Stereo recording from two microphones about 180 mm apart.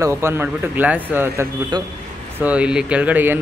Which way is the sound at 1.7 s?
25° right (ahead or behind).